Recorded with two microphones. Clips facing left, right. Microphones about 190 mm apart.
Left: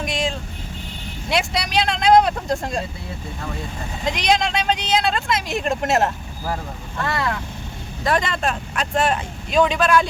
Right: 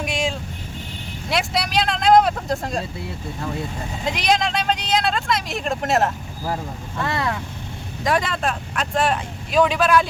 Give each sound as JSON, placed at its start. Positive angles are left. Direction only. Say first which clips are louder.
{"t": 0.0, "sound": "vehicle", "louder": "even", "side_deg": -10}
{"t": 4.0, "sound": "speech", "louder": "left 1 dB", "side_deg": -5}
{"t": 7.0, "sound": "speech", "louder": "even", "side_deg": -20}
{"t": 8.0, "sound": "speech", "louder": "even", "side_deg": -5}